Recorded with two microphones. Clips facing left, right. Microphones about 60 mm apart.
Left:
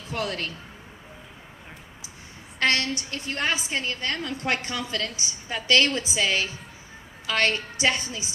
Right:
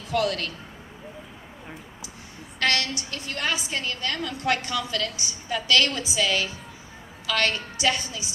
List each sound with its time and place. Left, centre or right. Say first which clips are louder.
0.1 s a woman's voice: right 5 dB; left
2.6 s a woman's voice: left 1 dB; left